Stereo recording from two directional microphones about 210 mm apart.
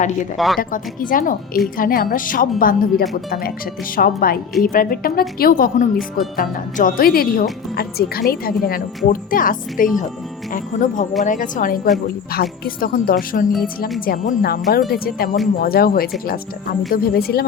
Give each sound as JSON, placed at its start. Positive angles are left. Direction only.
{"t": 0.3, "sound": "speech", "side_deg": 0}
{"t": 0.6, "sound": "a woman's voice", "side_deg": 40}